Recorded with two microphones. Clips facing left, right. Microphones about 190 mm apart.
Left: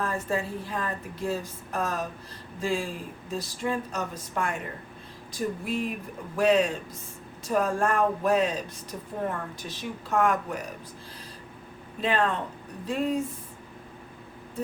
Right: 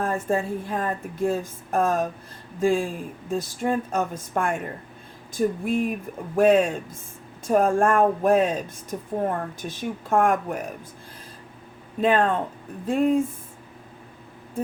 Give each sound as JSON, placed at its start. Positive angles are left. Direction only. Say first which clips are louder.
{"t": 0.0, "sound": "speech", "louder": "right 5 dB", "side_deg": -50}
{"t": 11.9, "sound": "speech", "louder": "right 5 dB", "side_deg": -50}
{"t": 12.8, "sound": "a sound", "louder": "right 7 dB", "side_deg": -50}